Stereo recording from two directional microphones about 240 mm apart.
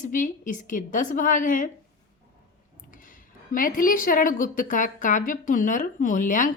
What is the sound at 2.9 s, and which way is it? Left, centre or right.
Speech, left.